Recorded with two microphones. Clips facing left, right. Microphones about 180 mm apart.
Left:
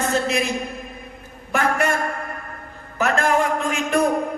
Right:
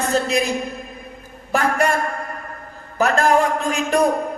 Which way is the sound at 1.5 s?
35° right (ahead or behind).